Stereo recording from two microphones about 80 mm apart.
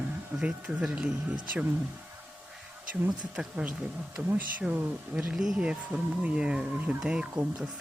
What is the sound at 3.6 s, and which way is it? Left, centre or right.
Speech, centre.